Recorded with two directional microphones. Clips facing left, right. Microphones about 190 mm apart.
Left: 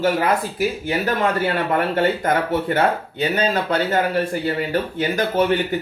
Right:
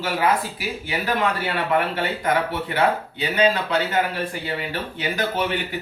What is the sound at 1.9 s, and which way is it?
Speech, 50° left (ahead or behind).